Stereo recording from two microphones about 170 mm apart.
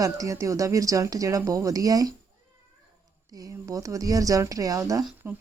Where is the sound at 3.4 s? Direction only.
20° right (ahead or behind).